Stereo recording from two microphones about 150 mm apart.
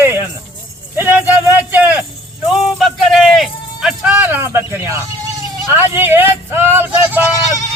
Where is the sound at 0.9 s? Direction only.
15° right (ahead or behind).